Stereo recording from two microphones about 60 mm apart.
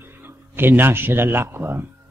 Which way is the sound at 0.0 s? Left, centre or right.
Right.